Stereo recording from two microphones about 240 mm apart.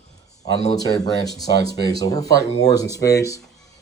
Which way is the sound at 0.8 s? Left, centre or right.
Centre.